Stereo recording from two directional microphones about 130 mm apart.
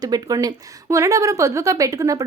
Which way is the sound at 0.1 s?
30° right (ahead or behind).